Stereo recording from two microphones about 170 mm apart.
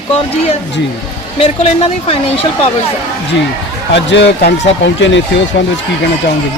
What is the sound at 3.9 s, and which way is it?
Speech, 80° left.